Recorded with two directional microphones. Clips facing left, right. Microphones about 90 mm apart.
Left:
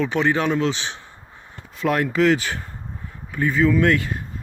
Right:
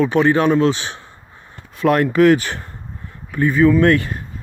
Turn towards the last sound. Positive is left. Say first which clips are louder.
# right 5 dB
turn(degrees=-50)  # may be behind; listen again after turning